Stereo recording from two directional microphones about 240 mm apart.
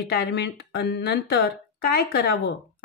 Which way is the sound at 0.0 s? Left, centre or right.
Left.